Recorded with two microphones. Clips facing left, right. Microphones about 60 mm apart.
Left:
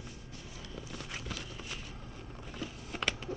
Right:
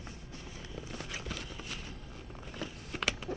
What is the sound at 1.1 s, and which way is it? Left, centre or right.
Clip-clop, centre.